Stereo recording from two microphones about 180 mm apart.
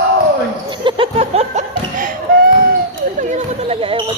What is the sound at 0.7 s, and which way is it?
Laughter, 25° right (ahead or behind).